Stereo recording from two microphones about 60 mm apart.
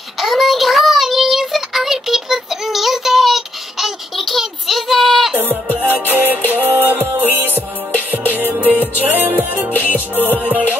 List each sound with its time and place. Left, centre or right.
0.2 s child singing: centre
5.3 s music: right
9.7 s music: left